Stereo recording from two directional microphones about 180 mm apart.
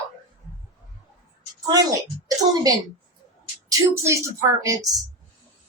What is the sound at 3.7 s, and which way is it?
A woman's voice, 15° right (ahead or behind).